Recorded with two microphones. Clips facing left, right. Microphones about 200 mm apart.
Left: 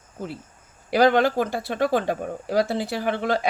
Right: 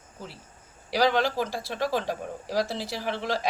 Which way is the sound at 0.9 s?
55° left (ahead or behind).